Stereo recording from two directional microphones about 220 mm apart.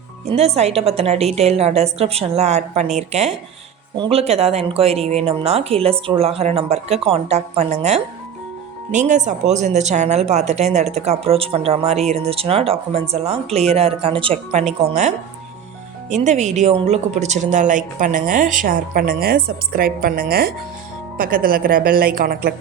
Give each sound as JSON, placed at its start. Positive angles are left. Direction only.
{"t": 0.3, "sound": "speech", "side_deg": -30}